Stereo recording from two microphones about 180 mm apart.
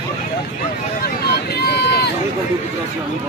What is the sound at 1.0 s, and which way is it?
Vehicle, 60° left (ahead or behind).